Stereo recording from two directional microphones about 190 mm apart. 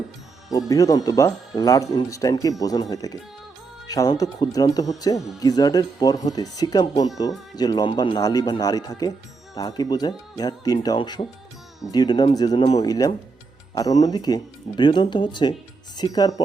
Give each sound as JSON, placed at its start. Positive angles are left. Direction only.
{"t": 0.5, "sound": "speech", "side_deg": 20}